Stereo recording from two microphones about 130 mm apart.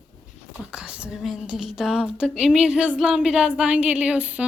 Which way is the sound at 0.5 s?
5° right (ahead or behind).